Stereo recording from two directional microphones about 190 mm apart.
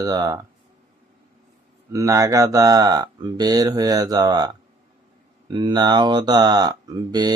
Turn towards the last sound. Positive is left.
turn(degrees=-20)  # may be behind; listen again after turning